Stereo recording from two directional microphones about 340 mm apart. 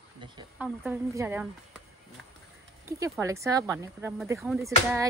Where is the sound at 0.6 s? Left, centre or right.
Centre.